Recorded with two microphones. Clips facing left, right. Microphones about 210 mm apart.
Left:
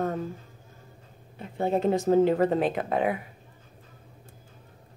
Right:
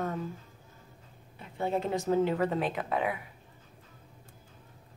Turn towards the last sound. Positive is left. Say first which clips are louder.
# left 5 dB
turn(degrees=40)  # may be behind; listen again after turning